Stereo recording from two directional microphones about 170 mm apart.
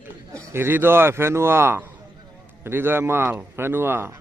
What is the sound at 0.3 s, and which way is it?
A man's voice, 15° right (ahead or behind).